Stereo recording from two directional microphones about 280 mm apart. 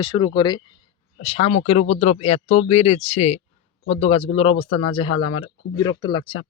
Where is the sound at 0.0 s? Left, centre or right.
Centre.